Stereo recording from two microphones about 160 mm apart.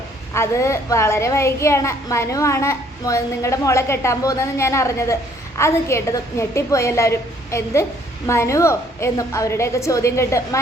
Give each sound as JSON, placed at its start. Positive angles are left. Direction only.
{"t": 0.3, "sound": "a child's voice", "side_deg": 15}